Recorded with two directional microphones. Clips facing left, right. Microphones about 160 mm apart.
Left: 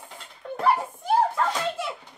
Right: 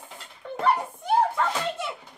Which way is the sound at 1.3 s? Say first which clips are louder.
Left 1 dB; centre (ahead or behind).